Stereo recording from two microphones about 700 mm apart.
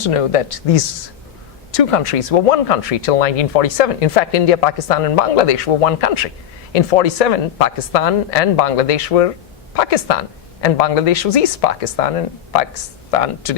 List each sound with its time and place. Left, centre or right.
0.0 s speech: left
1.7 s speech: left